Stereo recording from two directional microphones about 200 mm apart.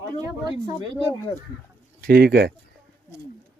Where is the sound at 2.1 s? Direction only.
50° right (ahead or behind).